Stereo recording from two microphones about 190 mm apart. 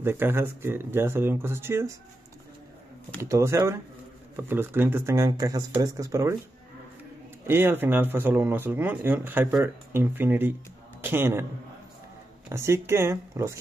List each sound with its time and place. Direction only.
0.0 s speech: 10° right (ahead or behind)
3.2 s speech: 15° right (ahead or behind)
7.4 s speech: 10° right (ahead or behind)
12.4 s speech: 15° right (ahead or behind)